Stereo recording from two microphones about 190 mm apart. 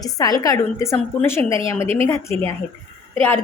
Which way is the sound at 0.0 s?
20° left (ahead or behind).